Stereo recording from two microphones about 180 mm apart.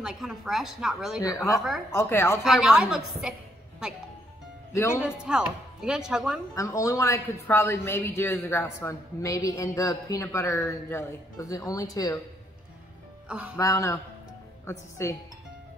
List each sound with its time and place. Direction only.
0.0 s speech: 5° right (ahead or behind)
1.2 s a man's voice: 15° left (ahead or behind)
2.4 s speech: 5° right (ahead or behind)
4.7 s a man's voice: 15° left (ahead or behind)
5.0 s speech: 5° right (ahead or behind)
6.5 s a man's voice: 20° left (ahead or behind)
13.3 s speech: 5° right (ahead or behind)
13.6 s a man's voice: 15° left (ahead or behind)